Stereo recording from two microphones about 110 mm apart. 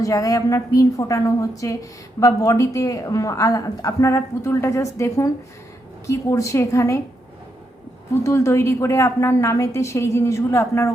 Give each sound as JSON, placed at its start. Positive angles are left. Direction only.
{"t": 0.0, "sound": "a woman's voice", "side_deg": 30}
{"t": 8.2, "sound": "a woman's voice", "side_deg": 25}